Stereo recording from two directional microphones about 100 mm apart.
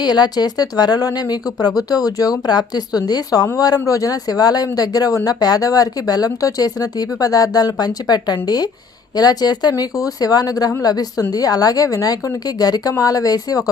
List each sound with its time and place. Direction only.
0.0 s speech: 45° left (ahead or behind)